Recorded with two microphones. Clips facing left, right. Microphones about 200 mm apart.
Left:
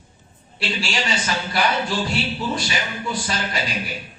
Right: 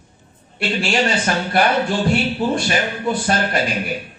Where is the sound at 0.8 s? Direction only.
55° right (ahead or behind).